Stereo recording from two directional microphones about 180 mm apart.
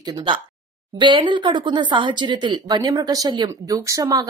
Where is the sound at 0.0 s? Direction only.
25° right (ahead or behind).